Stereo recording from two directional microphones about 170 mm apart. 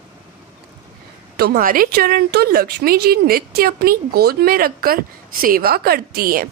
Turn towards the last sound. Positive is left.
turn(degrees=-60)  # may be behind; listen again after turning